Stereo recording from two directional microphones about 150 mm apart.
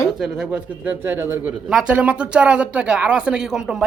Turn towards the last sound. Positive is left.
turn(degrees=0)  # may be behind; listen again after turning